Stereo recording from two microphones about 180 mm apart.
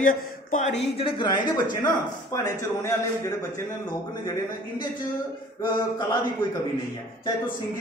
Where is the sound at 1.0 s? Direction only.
25° left (ahead or behind).